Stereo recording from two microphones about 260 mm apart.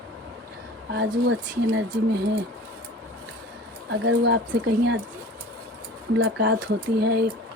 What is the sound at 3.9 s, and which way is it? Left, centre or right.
A woman's voice, right.